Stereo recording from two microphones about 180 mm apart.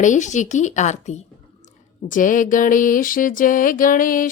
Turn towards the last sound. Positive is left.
turn(degrees=50)  # may be behind; listen again after turning